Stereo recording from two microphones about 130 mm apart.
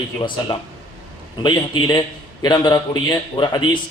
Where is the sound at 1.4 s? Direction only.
35° left (ahead or behind).